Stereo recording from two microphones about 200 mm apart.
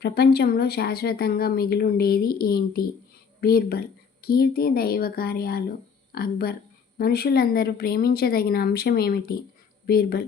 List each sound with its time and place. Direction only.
0.0 s speech: 55° left (ahead or behind)